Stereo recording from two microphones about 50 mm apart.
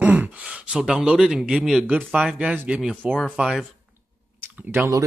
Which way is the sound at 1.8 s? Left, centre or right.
Right.